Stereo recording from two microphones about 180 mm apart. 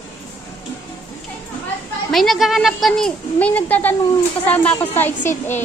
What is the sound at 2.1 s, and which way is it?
Speech, centre (ahead or behind).